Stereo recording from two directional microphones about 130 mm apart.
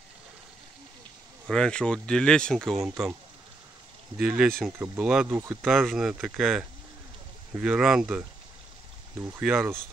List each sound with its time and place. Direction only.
1.5 s speech: 5° left (ahead or behind)
4.2 s speech: 5° right (ahead or behind)
5.3 s speech: 20° right (ahead or behind)
5.7 s speech: centre (ahead or behind)
9.4 s speech: 5° right (ahead or behind)